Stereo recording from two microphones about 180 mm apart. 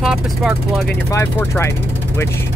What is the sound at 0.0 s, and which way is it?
Speech, 5° right (ahead or behind).